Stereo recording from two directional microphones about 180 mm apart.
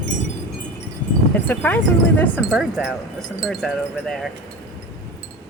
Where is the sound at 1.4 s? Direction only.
10° left (ahead or behind).